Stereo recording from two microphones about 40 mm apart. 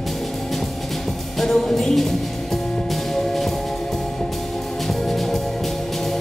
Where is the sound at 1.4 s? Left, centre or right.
Centre.